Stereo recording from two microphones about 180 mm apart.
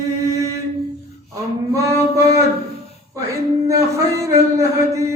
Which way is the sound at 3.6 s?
15° right (ahead or behind).